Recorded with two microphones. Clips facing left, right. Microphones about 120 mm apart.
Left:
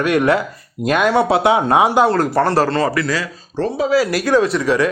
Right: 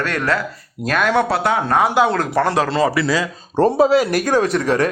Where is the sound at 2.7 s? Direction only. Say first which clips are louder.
Right 1 dB; 10° right (ahead or behind).